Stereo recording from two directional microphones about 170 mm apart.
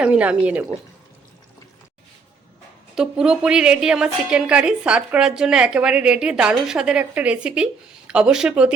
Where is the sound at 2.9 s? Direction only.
5° right (ahead or behind).